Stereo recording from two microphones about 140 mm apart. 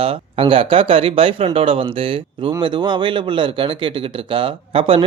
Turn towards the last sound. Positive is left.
turn(degrees=-40)  # may be behind; listen again after turning